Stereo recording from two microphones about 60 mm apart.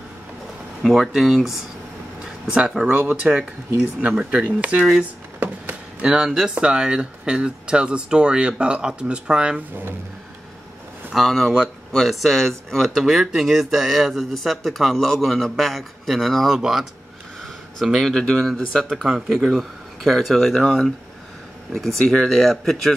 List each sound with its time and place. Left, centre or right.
0.8 s speech: centre
2.2 s a sound: centre
2.9 s speech: right
5.4 s chop: right
6.0 s speech: centre
11.1 s speech: centre
13.0 s speech: centre
17.7 s speech: centre